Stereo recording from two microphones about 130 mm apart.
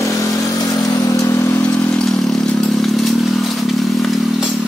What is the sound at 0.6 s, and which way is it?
Vehicle, 25° left (ahead or behind).